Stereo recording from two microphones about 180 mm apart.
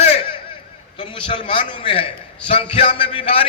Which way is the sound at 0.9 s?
30° left (ahead or behind).